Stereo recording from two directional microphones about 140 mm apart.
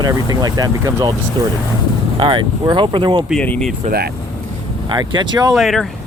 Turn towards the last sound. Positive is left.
turn(degrees=0)  # may be behind; listen again after turning